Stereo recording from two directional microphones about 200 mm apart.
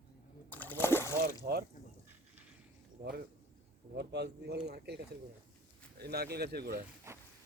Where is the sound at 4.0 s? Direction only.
55° right (ahead or behind).